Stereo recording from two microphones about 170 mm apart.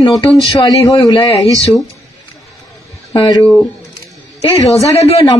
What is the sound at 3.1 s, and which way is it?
Speech, 25° left (ahead or behind).